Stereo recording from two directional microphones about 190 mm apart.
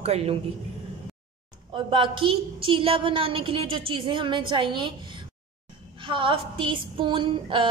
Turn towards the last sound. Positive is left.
turn(degrees=-25)  # may be behind; listen again after turning